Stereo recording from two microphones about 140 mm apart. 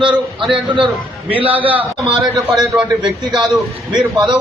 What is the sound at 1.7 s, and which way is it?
A man's voice, 10° right (ahead or behind).